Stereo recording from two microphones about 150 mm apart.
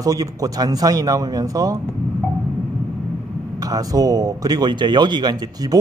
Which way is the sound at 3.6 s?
25° right (ahead or behind).